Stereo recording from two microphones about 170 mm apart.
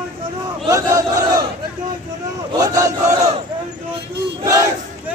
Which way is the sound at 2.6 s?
20° right (ahead or behind).